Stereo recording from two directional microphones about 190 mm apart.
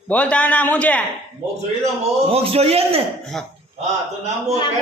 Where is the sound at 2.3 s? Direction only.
30° right (ahead or behind).